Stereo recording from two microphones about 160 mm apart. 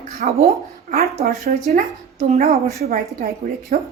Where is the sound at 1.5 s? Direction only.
70° right (ahead or behind).